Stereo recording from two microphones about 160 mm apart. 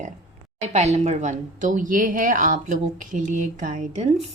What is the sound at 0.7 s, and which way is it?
A woman's voice, 45° right (ahead or behind).